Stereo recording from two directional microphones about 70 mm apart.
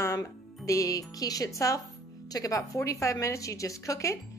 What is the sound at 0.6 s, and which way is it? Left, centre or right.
A woman's voice, left.